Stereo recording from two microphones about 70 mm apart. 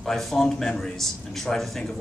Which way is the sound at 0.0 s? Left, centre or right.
Centre.